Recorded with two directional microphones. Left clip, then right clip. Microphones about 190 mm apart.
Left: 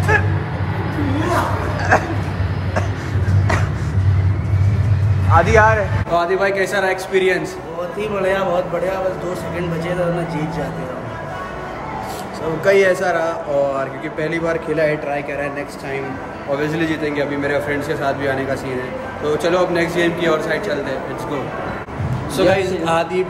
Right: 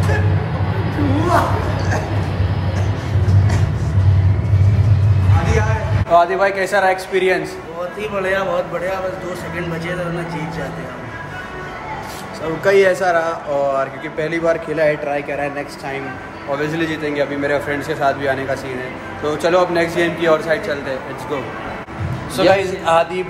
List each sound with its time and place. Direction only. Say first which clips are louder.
1.0 s a sound: right 3 dB; centre (ahead or behind)
5.3 s a sound: left 9 dB; centre (ahead or behind)
8.0 s a man's voice: left 1 dB; 15° left (ahead or behind)
12.6 s speech: right 1 dB; centre (ahead or behind)
16.5 s speech: even; centre (ahead or behind)
22.4 s speech: right 2 dB; centre (ahead or behind)